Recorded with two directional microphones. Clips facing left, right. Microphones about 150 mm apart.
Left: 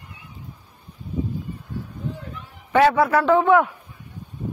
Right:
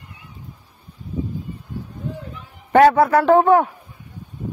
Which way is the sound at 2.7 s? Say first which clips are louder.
Right 4 dB; 50° right (ahead or behind).